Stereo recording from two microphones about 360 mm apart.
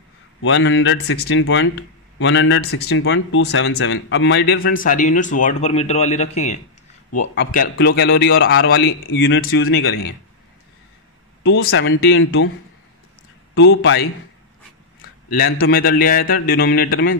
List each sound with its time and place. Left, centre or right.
0.4 s speech: left
11.4 s speech: left
13.6 s speech: left
15.3 s speech: left